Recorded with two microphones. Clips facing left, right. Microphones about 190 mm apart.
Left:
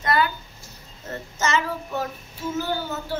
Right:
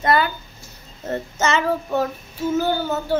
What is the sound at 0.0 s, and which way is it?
Speech, 25° right (ahead or behind).